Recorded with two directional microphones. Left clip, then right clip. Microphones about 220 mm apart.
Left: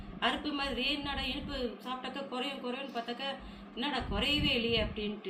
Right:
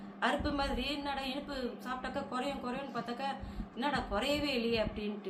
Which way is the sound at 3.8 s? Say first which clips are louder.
Even; 15° right (ahead or behind).